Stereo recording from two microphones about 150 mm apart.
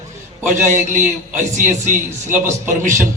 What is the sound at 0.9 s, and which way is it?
A man's voice, 55° right (ahead or behind).